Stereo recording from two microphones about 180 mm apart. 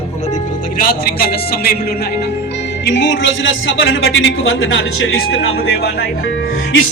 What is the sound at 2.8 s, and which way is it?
A man's voice, 90° left.